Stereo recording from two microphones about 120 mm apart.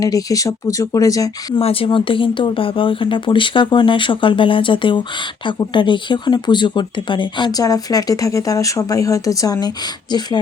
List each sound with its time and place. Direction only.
0.0 s speech: 30° left (ahead or behind)
1.6 s speech: 50° left (ahead or behind); by 10.3 s 35° left (ahead or behind)